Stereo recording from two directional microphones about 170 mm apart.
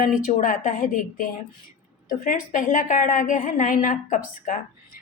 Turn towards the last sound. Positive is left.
turn(degrees=50)  # may be behind; listen again after turning